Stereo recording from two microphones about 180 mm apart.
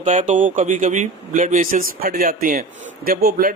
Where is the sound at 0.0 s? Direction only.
45° right (ahead or behind).